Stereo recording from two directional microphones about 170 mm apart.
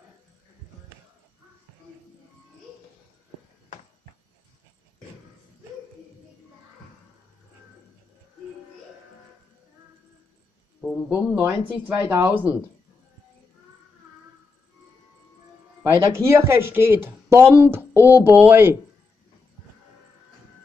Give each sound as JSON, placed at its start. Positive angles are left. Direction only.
{"t": 10.8, "sound": "a sound", "side_deg": 5}
{"t": 11.3, "sound": "speech", "side_deg": -15}
{"t": 16.1, "sound": "speech", "side_deg": -15}